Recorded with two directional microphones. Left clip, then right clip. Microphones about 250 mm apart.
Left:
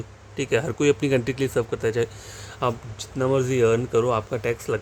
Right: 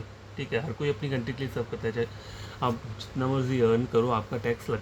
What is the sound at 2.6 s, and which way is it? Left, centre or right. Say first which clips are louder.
Speech: left 4 dB; left.